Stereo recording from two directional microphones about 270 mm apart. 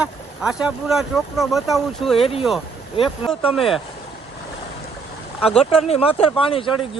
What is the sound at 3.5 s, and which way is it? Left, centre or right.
Speech, centre.